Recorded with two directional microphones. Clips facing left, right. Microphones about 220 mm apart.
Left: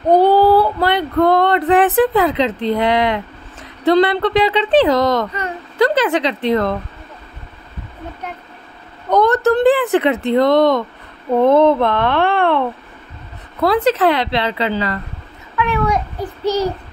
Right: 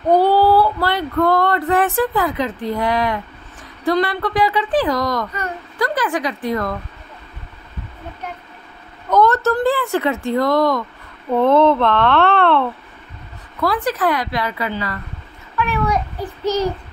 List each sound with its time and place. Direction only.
0.1 s child singing: 20° left (ahead or behind)
1.2 s speech: 20° left (ahead or behind)
9.1 s speech: 15° left (ahead or behind)
13.6 s speech: 25° left (ahead or behind)
16.4 s speech: 10° left (ahead or behind)